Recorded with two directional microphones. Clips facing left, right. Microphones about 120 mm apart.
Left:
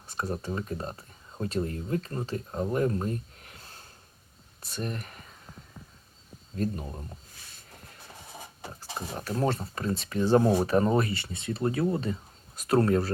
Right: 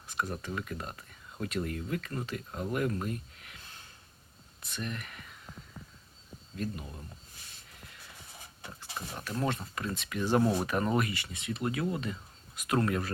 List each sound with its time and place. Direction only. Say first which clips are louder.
0.1 s speech: left 3 dB; 35° left (ahead or behind)
6.6 s speech: left 6 dB; 40° left (ahead or behind)
7.9 s a sound: left 3 dB; 40° left (ahead or behind)
8.6 s speech: left 4 dB; 35° left (ahead or behind)